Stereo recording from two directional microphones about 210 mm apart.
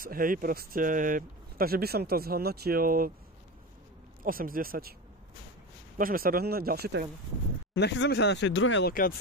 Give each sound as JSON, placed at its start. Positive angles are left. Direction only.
{"t": 0.0, "sound": "speech", "side_deg": -40}
{"t": 4.2, "sound": "speech", "side_deg": -45}
{"t": 5.9, "sound": "speech", "side_deg": -45}
{"t": 7.7, "sound": "speech", "side_deg": 60}